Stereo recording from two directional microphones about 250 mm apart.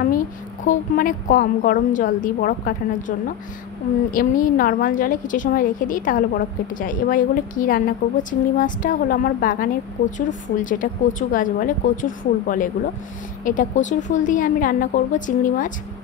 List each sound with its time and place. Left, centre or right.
0.7 s a woman's voice: left